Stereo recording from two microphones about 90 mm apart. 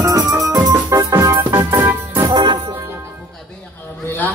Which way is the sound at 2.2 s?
50° right (ahead or behind).